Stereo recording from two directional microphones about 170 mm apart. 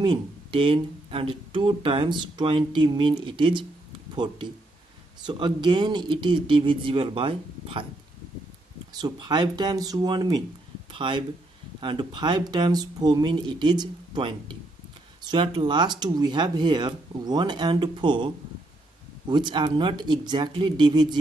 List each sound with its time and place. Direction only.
0.0 s speech: 30° right (ahead or behind)
8.9 s speech: 25° right (ahead or behind)